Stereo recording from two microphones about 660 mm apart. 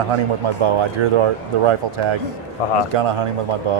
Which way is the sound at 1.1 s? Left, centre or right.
Right.